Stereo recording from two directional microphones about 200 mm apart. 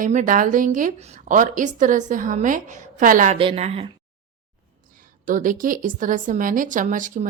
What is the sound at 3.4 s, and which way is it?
Speech, 30° right (ahead or behind).